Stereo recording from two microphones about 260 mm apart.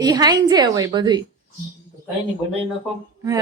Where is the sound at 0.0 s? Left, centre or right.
Centre.